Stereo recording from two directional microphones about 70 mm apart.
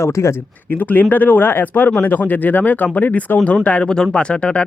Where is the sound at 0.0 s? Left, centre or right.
Left.